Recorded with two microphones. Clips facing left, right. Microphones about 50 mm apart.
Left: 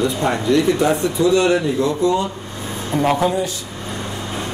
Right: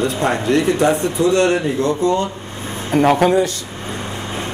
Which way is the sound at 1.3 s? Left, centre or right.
Right.